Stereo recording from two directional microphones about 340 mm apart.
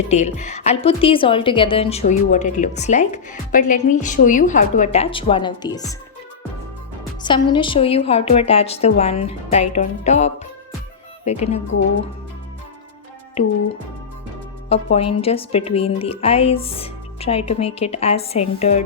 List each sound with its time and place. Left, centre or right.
0.1 s a woman's voice: centre
7.2 s a woman's voice: centre
13.4 s a woman's voice: centre
14.9 s speech: centre